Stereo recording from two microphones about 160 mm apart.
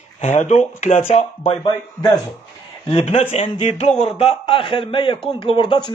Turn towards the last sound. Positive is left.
turn(degrees=30)  # may be behind; listen again after turning